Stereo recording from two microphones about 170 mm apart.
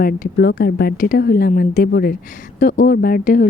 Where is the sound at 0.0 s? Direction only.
60° left (ahead or behind).